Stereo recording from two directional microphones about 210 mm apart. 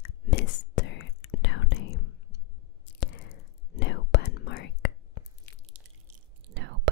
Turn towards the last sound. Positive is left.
turn(degrees=-55)  # may be behind; listen again after turning